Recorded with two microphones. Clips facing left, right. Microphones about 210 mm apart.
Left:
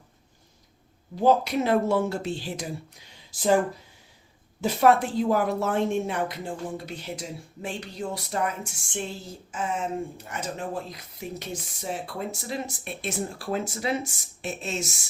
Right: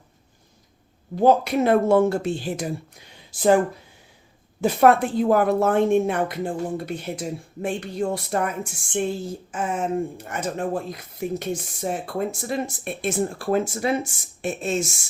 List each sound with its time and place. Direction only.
1.1 s speech: 55° right (ahead or behind)
4.6 s a woman's voice: 55° right (ahead or behind)